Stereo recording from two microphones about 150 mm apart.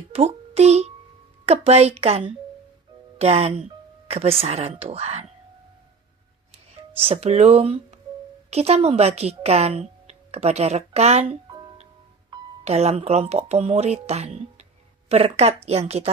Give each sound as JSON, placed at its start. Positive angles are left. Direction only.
{"t": 0.1, "sound": "a child's voice", "side_deg": -45}
{"t": 7.1, "sound": "speech", "side_deg": -45}
{"t": 11.4, "sound": "music", "side_deg": -25}
{"t": 12.6, "sound": "speech", "side_deg": -45}